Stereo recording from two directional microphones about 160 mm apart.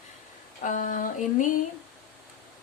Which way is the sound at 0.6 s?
55° left (ahead or behind).